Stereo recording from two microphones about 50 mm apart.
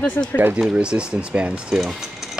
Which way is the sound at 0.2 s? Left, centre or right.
Left.